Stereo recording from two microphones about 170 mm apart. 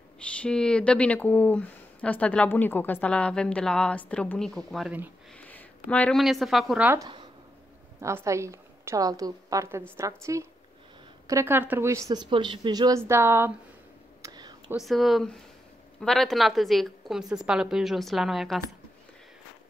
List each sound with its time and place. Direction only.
0.2 s speech: 5° left (ahead or behind)
8.0 s a woman's voice: 15° right (ahead or behind)
14.2 s whispering: 25° right (ahead or behind)
14.8 s a woman's voice: centre (ahead or behind)